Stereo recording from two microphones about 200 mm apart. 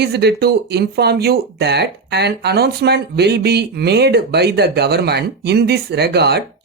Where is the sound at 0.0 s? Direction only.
55° right (ahead or behind).